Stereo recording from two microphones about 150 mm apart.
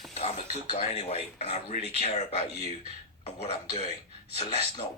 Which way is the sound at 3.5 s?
40° left (ahead or behind).